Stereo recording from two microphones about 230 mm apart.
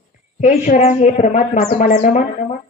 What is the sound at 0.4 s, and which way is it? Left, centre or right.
A woman's voice, left.